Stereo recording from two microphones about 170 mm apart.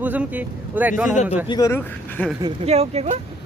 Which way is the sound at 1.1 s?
45° left (ahead or behind).